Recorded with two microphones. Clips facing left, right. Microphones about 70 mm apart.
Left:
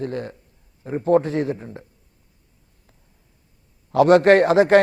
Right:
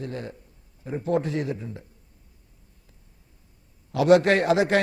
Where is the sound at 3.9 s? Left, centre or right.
Left.